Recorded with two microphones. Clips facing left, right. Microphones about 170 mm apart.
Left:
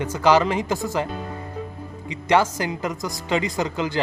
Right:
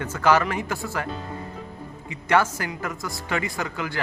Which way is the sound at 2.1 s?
20° left (ahead or behind).